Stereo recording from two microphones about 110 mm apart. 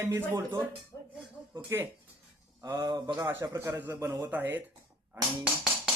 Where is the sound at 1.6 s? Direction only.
20° right (ahead or behind).